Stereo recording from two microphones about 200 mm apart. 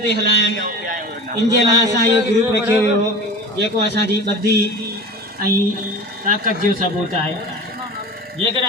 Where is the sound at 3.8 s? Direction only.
55° right (ahead or behind).